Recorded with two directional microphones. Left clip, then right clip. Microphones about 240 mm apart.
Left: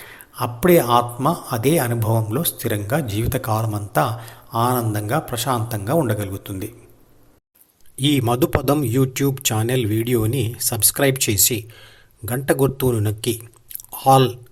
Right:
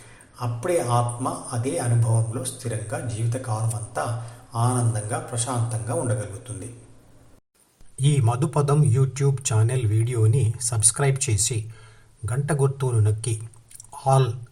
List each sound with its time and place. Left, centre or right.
0.3 s a man's voice: left
8.0 s speech: left